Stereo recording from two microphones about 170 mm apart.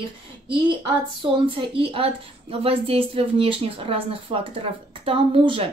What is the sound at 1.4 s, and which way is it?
Speech, 30° right (ahead or behind).